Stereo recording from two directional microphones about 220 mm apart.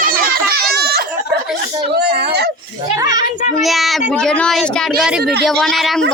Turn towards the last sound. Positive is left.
turn(degrees=0)  # may be behind; listen again after turning